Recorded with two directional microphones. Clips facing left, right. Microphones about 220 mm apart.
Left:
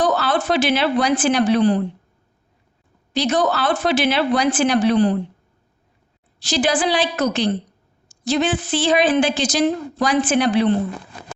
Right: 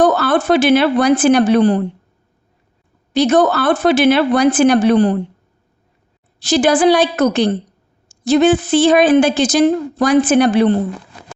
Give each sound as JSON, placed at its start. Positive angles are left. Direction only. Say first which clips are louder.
{"t": 0.0, "sound": "a woman's voice", "louder": "right 6 dB", "side_deg": -50}
{"t": 3.1, "sound": "a woman's voice", "louder": "right 7 dB", "side_deg": -50}
{"t": 6.4, "sound": "a woman's voice", "louder": "right 7 dB", "side_deg": -50}